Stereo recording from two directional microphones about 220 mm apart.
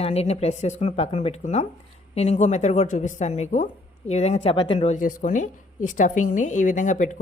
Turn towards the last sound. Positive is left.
turn(degrees=35)  # may be behind; listen again after turning